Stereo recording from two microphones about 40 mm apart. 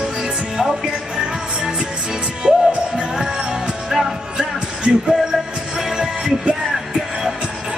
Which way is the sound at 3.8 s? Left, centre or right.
Centre.